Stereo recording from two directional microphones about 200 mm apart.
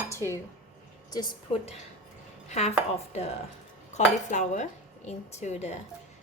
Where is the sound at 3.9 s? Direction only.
35° left (ahead or behind).